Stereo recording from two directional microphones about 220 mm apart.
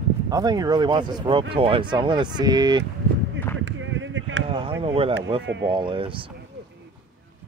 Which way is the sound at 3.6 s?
60° right (ahead or behind).